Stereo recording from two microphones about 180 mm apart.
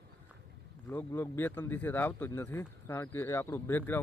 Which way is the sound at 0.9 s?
10° left (ahead or behind).